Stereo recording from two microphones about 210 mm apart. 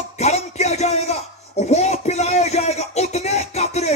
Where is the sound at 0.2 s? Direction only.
30° left (ahead or behind).